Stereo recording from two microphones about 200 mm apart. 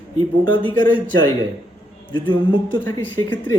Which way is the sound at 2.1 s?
25° left (ahead or behind).